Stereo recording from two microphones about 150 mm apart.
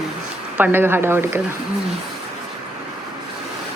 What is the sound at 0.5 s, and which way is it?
Speech, 15° right (ahead or behind).